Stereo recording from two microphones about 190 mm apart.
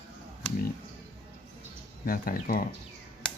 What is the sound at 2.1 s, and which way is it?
Speech, 50° left (ahead or behind).